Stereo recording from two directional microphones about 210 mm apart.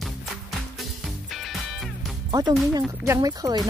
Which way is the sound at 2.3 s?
20° right (ahead or behind).